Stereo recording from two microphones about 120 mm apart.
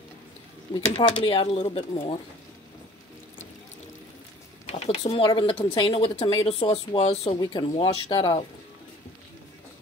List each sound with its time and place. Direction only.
0.8 s speech: 50° left (ahead or behind)
4.6 s a sound: 60° left (ahead or behind)
5.0 s speech: 40° left (ahead or behind); by 7.3 s 55° left (ahead or behind)
7.3 s speech: 45° left (ahead or behind)